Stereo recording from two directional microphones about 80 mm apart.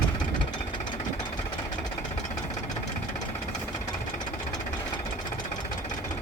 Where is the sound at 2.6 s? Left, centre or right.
Left.